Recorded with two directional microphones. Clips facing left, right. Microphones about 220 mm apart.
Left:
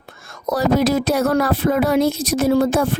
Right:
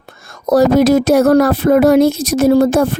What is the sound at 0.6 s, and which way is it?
Speech, 75° right (ahead or behind).